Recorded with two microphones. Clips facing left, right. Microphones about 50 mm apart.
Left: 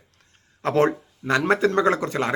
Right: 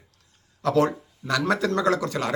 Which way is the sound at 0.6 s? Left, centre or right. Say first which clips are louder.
Left 1 dB; left.